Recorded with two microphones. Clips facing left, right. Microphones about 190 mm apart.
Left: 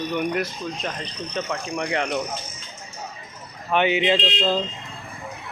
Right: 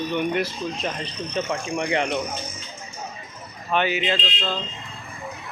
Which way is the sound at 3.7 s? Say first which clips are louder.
Left 3 dB; 20° left (ahead or behind).